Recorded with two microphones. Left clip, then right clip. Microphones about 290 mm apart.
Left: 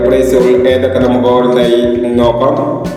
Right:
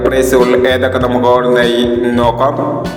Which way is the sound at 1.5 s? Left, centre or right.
Right.